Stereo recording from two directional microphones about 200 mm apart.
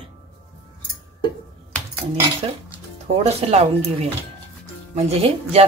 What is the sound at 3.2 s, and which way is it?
A woman's voice, 30° right (ahead or behind).